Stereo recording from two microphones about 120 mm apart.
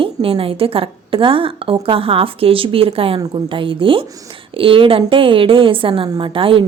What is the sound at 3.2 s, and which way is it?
A woman's voice, 40° right (ahead or behind).